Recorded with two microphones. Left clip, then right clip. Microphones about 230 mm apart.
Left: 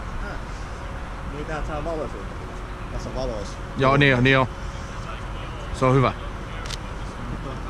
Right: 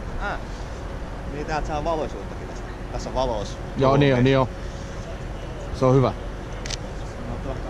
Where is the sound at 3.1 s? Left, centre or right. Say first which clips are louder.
Right 6 dB; right.